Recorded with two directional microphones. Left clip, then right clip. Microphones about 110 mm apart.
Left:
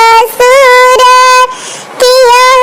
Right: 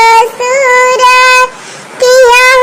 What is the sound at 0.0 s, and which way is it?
Child singing, 55° left (ahead or behind).